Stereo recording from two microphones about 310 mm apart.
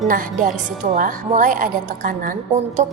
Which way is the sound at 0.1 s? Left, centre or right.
Right.